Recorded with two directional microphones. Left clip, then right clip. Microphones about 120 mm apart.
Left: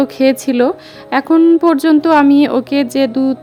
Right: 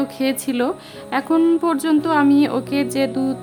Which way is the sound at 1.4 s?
40° left (ahead or behind).